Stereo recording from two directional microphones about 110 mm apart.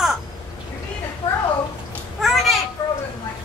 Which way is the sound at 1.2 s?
50° left (ahead or behind).